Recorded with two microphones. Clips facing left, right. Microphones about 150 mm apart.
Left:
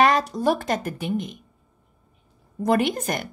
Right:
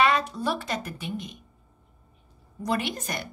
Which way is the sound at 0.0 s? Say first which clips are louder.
Left 4 dB; 40° left (ahead or behind).